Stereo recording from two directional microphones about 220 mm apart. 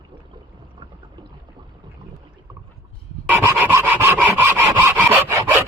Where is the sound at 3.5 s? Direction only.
10° right (ahead or behind).